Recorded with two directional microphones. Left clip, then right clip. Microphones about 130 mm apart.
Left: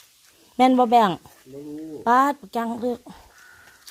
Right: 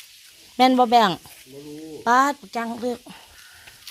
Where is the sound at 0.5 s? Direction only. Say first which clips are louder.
Even; 10° left (ahead or behind).